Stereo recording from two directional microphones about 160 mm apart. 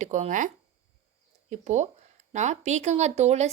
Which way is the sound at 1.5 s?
45° right (ahead or behind).